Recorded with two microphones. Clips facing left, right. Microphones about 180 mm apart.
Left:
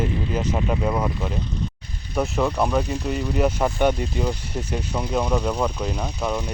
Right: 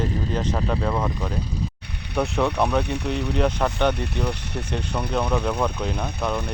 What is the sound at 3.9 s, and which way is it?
Speech, 65° right (ahead or behind).